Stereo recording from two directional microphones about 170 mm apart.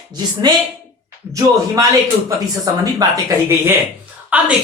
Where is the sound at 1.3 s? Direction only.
20° right (ahead or behind).